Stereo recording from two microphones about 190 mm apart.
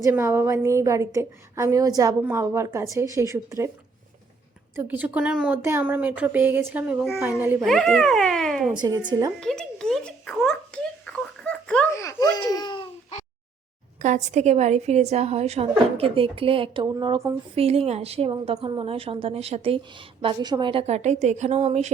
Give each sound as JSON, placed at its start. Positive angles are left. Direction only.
{"t": 0.0, "sound": "speech", "side_deg": -15}
{"t": 4.7, "sound": "speech", "side_deg": -10}
{"t": 7.6, "sound": "speech", "side_deg": 0}
{"t": 8.8, "sound": "speech", "side_deg": -20}
{"t": 9.4, "sound": "a sound", "side_deg": 5}
{"t": 11.9, "sound": "baby laughter", "side_deg": 15}
{"t": 14.0, "sound": "a woman's voice", "side_deg": -40}
{"t": 17.5, "sound": "a woman's voice", "side_deg": -30}